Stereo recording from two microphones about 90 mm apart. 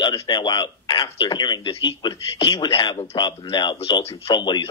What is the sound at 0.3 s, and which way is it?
A man's voice, 60° left (ahead or behind).